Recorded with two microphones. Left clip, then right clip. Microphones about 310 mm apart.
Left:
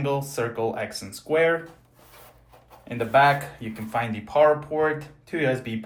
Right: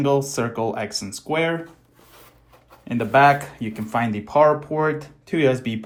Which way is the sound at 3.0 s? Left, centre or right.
Right.